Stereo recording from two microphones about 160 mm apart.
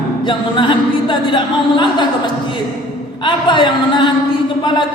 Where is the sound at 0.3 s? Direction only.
30° left (ahead or behind).